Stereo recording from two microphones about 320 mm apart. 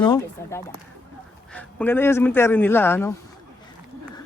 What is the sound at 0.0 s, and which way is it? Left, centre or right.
Speech, centre.